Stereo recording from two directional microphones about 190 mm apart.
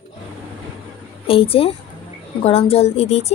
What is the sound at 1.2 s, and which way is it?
A woman's voice, 30° left (ahead or behind).